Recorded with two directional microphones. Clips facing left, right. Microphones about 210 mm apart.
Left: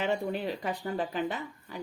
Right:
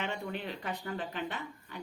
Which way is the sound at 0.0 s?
40° left (ahead or behind).